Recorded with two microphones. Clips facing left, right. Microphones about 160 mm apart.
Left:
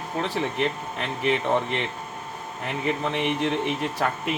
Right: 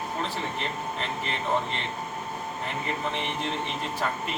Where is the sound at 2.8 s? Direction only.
65° left (ahead or behind).